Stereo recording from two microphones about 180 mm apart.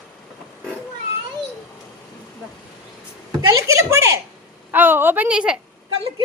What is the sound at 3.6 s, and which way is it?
A woman's voice, 15° right (ahead or behind).